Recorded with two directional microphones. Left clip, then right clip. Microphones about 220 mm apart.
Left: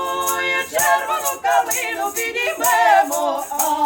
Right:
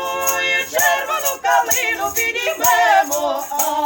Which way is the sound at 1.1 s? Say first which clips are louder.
Right 1 dB; 10° right (ahead or behind).